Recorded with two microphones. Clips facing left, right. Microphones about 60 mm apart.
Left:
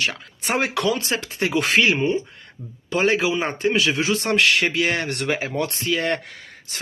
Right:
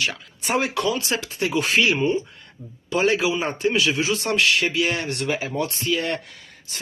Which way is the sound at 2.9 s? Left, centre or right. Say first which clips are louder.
Left 1 dB; left.